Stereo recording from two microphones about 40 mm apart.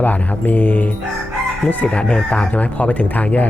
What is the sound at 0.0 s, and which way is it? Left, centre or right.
A man's voice, left.